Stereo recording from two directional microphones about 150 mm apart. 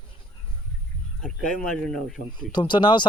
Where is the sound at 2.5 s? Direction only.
30° left (ahead or behind).